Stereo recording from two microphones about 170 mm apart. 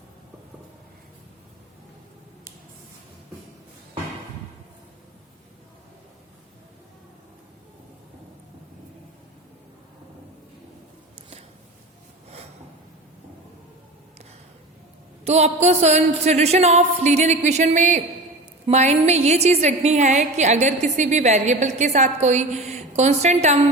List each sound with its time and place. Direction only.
15.2 s a woman's voice: 40° right (ahead or behind)